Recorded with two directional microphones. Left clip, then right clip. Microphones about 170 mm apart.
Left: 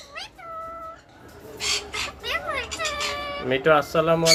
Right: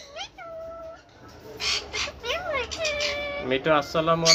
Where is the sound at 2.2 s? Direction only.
15° right (ahead or behind).